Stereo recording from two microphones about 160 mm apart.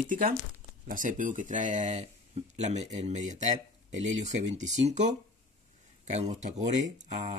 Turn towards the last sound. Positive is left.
turn(degrees=-50)  # may be behind; listen again after turning